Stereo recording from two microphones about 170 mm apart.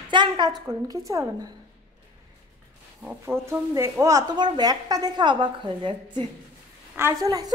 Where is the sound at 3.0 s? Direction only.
10° right (ahead or behind).